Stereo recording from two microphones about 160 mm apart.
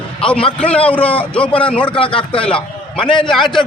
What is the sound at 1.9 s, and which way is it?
A man's voice, 35° left (ahead or behind).